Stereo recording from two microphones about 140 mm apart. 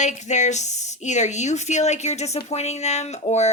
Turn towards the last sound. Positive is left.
turn(degrees=55)  # may be behind; listen again after turning